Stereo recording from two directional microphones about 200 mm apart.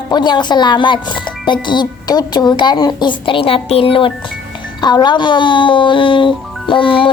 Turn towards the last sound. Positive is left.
turn(degrees=25)  # may be behind; listen again after turning